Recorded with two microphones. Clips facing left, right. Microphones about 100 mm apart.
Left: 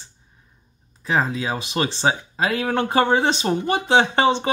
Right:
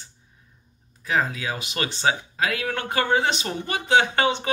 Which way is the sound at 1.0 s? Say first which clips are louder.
Left 3 dB; 30° left (ahead or behind).